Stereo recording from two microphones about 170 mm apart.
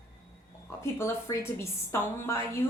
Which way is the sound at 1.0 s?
15° left (ahead or behind).